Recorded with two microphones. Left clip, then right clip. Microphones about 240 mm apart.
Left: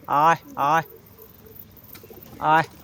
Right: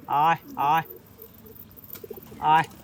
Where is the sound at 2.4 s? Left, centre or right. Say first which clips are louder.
Left 1 dB; left.